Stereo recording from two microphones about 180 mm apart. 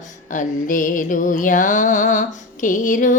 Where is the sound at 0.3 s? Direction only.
45° left (ahead or behind).